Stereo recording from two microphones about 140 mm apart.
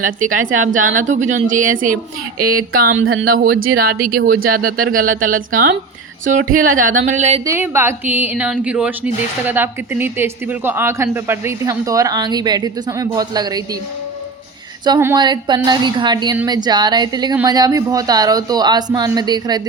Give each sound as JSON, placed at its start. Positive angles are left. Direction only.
{"t": 0.0, "sound": "a woman's voice", "side_deg": -70}
{"t": 3.2, "sound": "speech", "side_deg": -90}
{"t": 6.2, "sound": "a sound", "side_deg": -70}
{"t": 7.4, "sound": "a woman's voice", "side_deg": -20}
{"t": 14.9, "sound": "speech", "side_deg": -20}
{"t": 15.2, "sound": "a woman's voice", "side_deg": -30}